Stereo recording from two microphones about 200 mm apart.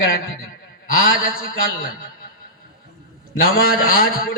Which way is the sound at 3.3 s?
45° left (ahead or behind).